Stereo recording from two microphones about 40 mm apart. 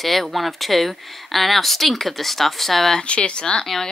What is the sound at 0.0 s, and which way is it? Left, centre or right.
A woman's voice, centre.